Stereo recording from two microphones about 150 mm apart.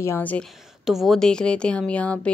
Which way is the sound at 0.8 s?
Centre (ahead or behind).